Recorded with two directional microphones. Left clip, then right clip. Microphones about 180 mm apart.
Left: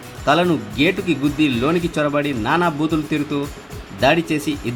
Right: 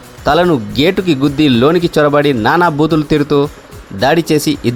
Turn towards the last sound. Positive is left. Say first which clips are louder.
# right 8 dB
turn(degrees=-60)  # may be behind; listen again after turning